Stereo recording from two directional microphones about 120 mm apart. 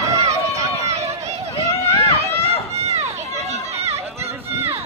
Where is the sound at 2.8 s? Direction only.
65° right (ahead or behind).